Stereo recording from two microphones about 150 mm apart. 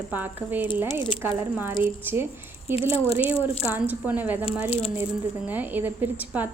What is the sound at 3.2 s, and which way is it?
Speech, 40° left (ahead or behind).